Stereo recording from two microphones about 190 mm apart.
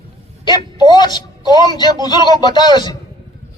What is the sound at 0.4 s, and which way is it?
Speech, 25° left (ahead or behind).